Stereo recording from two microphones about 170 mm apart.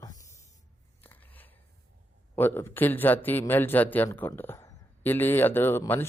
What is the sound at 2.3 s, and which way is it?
Speech, 15° left (ahead or behind).